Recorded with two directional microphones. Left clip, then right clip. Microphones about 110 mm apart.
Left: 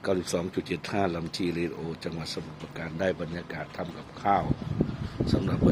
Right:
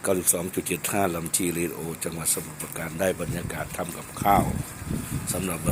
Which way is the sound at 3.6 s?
15° right (ahead or behind).